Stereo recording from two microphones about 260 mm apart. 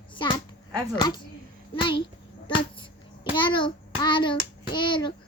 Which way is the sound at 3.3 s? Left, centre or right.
Centre.